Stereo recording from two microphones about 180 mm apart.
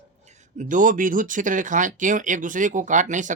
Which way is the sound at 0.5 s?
45° right (ahead or behind).